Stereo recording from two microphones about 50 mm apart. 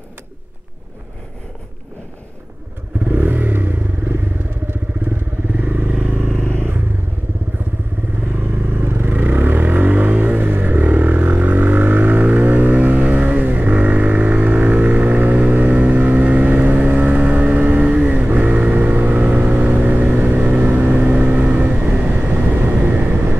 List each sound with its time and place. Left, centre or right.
3.1 s motorcycle: right
5.1 s vehicle: right
6.5 s vehicle: right
8.3 s vehicle: right